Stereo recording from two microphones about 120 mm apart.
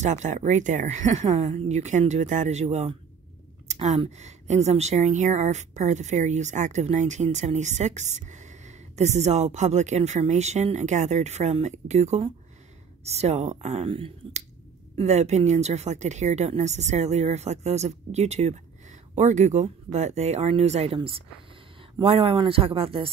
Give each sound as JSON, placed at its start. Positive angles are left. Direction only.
{"t": 0.0, "sound": "speech", "side_deg": -85}
{"t": 1.6, "sound": "a woman's voice", "side_deg": -75}
{"t": 13.8, "sound": "speech", "side_deg": -50}
{"t": 15.0, "sound": "speech", "side_deg": -70}